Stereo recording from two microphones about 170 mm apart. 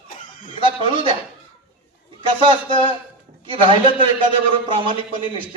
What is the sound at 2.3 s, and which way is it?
A man's voice, 30° right (ahead or behind).